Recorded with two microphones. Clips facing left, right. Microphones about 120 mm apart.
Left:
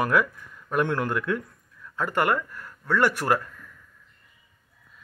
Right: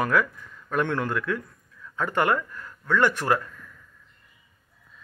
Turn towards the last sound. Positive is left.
turn(degrees=10)  # may be behind; listen again after turning